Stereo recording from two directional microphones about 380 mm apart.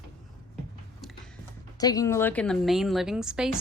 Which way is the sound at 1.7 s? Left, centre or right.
Centre.